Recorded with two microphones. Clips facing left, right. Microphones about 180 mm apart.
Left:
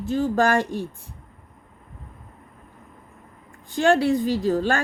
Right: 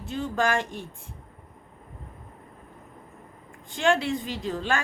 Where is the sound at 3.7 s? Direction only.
40° left (ahead or behind).